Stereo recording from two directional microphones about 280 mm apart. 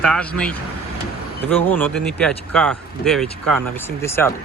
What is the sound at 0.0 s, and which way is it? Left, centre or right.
Speech, centre.